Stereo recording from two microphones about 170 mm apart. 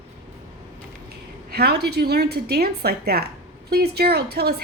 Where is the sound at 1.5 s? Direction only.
70° right (ahead or behind).